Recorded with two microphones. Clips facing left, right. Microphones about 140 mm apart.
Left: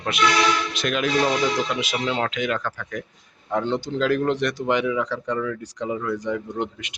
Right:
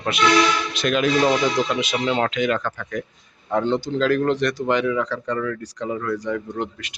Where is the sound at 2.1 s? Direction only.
Centre (ahead or behind).